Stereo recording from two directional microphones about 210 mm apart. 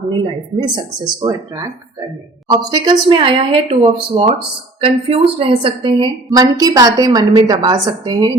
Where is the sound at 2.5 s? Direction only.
20° right (ahead or behind).